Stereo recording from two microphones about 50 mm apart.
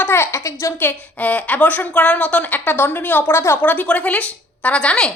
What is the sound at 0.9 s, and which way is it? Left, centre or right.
A woman's voice, left.